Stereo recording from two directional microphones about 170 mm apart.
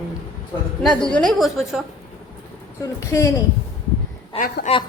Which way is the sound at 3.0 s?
20° left (ahead or behind).